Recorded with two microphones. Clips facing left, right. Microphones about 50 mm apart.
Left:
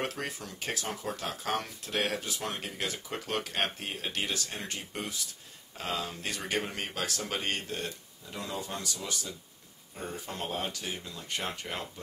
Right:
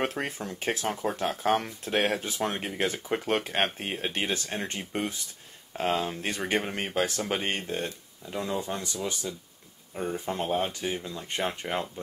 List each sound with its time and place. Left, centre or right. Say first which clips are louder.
0.0 s speech: right 5 dB; right
9.9 s speech: right 7 dB; right